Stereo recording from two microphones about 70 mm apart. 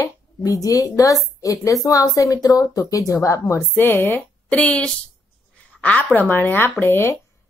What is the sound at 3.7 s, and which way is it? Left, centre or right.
A woman's voice, left.